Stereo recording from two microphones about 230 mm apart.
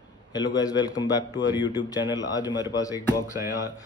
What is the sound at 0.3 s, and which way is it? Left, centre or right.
Speech, centre.